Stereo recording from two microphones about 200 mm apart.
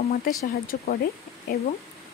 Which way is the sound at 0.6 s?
45° left (ahead or behind).